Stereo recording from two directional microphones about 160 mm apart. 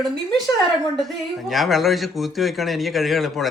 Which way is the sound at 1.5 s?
Centre (ahead or behind).